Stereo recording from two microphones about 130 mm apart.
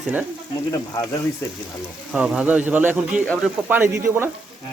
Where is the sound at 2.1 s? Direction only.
10° right (ahead or behind).